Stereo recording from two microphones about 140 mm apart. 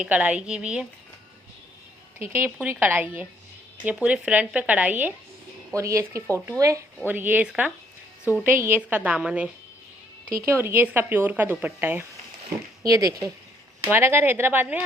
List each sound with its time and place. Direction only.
0.0 s speech: 10° right (ahead or behind)
2.3 s speech: 15° right (ahead or behind)